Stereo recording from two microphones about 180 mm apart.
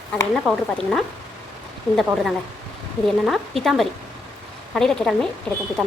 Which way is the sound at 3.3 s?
Centre (ahead or behind).